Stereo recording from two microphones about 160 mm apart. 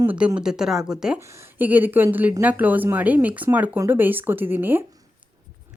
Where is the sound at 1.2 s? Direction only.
15° right (ahead or behind).